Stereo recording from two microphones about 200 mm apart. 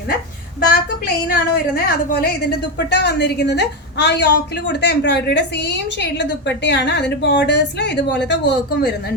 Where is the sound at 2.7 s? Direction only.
55° left (ahead or behind).